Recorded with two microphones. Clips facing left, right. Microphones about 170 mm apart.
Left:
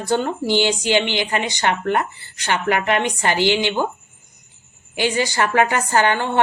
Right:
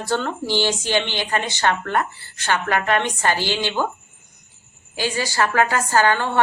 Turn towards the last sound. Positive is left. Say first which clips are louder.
# even
turn(degrees=20)  # may be behind; listen again after turning